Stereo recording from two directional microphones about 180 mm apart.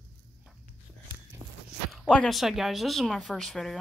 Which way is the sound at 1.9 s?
5° left (ahead or behind).